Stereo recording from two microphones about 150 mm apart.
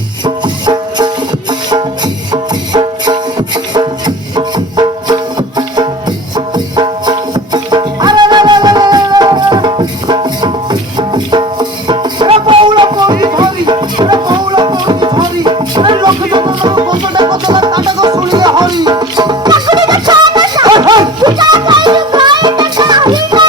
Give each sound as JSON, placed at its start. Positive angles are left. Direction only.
{"t": 0.3, "sound": "music", "side_deg": -30}